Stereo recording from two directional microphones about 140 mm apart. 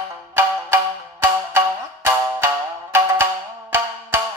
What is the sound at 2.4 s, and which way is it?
Music, 15° right (ahead or behind).